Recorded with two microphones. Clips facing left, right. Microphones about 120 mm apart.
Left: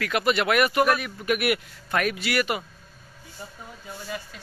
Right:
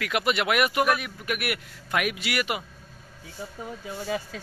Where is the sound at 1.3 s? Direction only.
Centre (ahead or behind).